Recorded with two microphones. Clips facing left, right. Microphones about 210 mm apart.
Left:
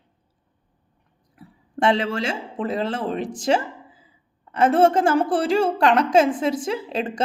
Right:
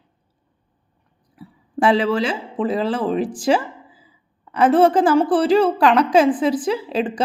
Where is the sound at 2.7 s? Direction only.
Centre (ahead or behind).